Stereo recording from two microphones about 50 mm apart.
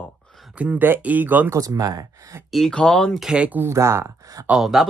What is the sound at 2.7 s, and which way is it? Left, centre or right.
Speech, centre.